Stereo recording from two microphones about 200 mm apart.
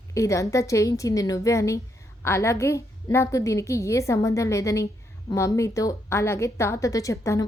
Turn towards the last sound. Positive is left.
turn(degrees=15)  # may be behind; listen again after turning